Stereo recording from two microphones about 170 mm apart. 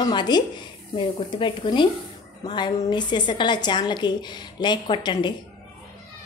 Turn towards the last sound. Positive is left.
turn(degrees=25)  # may be behind; listen again after turning